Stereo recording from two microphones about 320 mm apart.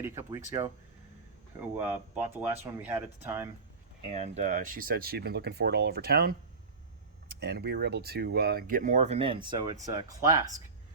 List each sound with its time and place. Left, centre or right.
0.0 s speech: centre
1.8 s speech: centre
4.1 s speech: right